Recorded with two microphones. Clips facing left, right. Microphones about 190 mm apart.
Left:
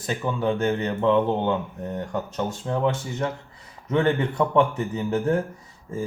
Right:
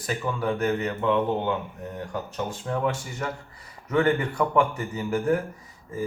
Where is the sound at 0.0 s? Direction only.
25° left (ahead or behind).